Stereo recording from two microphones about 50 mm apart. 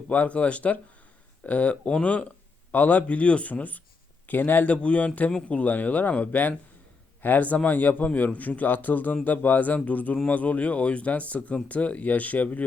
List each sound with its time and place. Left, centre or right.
0.1 s a man's voice: left